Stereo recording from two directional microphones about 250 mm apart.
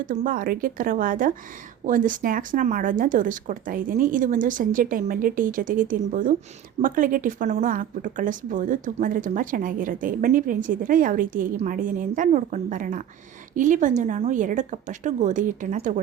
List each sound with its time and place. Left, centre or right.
0.0 s speech: right